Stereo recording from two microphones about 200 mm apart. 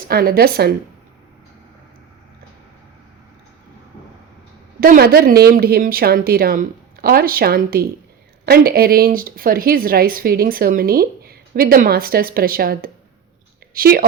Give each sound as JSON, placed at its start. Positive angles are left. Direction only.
{"t": 0.1, "sound": "speech", "side_deg": -50}
{"t": 4.8, "sound": "speech", "side_deg": -50}